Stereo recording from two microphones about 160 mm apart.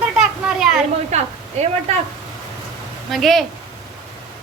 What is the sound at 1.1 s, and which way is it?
Speech, 40° right (ahead or behind).